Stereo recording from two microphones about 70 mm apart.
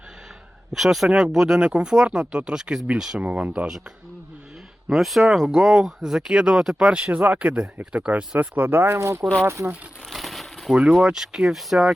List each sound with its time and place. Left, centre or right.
0.7 s speech: centre
4.9 s speech: centre
7.1 s speech: right
10.1 s crumpling: centre
10.8 s speech: centre